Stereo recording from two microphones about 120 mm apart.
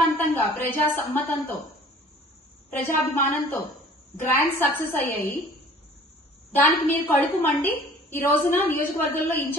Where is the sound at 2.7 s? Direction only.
20° left (ahead or behind).